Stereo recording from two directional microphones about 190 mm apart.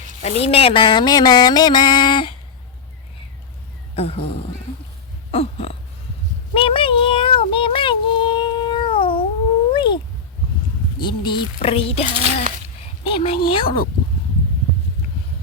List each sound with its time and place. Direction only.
0.2 s mantra: 35° left (ahead or behind)
3.9 s speech: 30° left (ahead or behind)
5.3 s a sound: 30° left (ahead or behind)
9.7 s cat: 25° left (ahead or behind)
11.0 s mantra: 25° left (ahead or behind)
13.1 s speech: 30° left (ahead or behind)
13.5 s mantra: 30° left (ahead or behind)